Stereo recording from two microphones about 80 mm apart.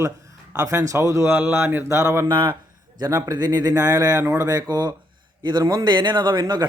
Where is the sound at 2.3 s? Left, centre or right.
Right.